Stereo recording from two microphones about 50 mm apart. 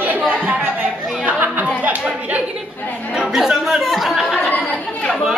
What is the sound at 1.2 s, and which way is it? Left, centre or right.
Chatter, right.